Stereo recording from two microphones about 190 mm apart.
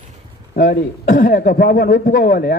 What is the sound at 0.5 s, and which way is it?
A man's voice, 50° left (ahead or behind).